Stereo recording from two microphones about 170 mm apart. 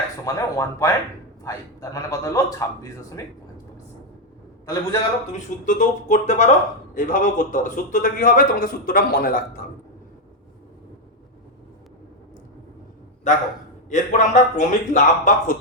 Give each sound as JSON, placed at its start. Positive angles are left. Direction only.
{"t": 0.3, "sound": "a man's voice", "side_deg": 20}
{"t": 4.6, "sound": "a man's voice", "side_deg": 20}
{"t": 5.6, "sound": "a man's voice", "side_deg": 45}
{"t": 13.9, "sound": "a man's voice", "side_deg": 45}